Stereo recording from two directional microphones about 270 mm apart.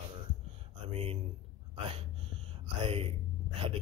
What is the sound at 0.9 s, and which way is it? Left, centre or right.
Speech, right.